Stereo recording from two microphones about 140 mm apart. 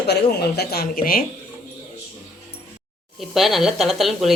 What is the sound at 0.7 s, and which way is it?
Speech, 90° left.